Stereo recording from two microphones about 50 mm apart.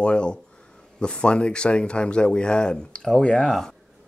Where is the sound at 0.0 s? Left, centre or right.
Centre.